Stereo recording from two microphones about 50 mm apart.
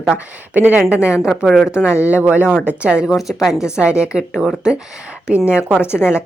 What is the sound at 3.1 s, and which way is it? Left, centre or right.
Speech, centre.